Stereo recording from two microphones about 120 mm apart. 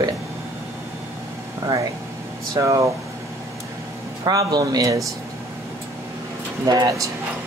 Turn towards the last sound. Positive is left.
turn(degrees=-30)  # may be behind; listen again after turning